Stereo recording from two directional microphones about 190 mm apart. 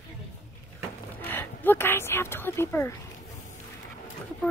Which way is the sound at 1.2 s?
10° left (ahead or behind).